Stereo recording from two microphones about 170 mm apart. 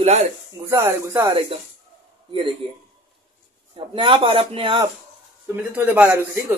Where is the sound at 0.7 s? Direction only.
15° right (ahead or behind).